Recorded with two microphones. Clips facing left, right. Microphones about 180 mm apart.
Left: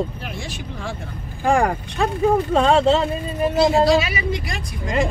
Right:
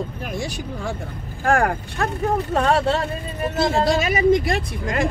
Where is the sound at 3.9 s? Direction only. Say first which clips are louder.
Right 4 dB; 50° right (ahead or behind).